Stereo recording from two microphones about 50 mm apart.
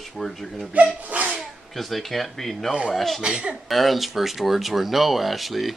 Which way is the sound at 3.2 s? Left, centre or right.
Centre.